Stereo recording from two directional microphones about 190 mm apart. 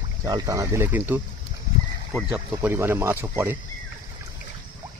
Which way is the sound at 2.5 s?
10° right (ahead or behind).